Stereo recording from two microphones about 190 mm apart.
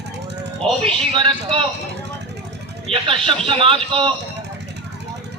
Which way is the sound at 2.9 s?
30° right (ahead or behind).